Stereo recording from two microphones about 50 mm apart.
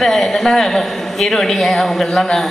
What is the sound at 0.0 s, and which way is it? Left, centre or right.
A man's voice, centre.